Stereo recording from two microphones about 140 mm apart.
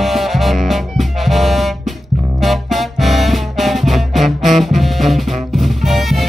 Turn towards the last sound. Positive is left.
turn(degrees=0)  # may be behind; listen again after turning